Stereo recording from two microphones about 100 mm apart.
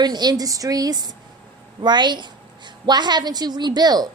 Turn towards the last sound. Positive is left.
turn(degrees=-45)  # may be behind; listen again after turning